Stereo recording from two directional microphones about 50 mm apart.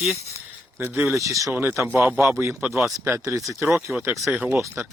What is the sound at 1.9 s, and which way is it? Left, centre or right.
Speech, right.